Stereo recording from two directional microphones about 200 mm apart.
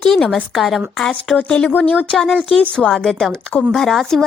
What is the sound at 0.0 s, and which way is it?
A woman's voice, centre (ahead or behind).